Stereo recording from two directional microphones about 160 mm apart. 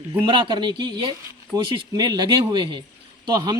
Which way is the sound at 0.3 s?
30° right (ahead or behind).